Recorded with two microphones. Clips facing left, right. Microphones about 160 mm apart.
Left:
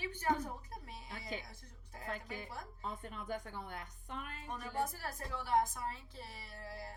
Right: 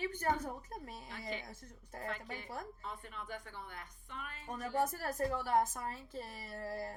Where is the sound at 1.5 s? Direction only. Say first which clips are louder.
Right 5 dB; 45° right (ahead or behind).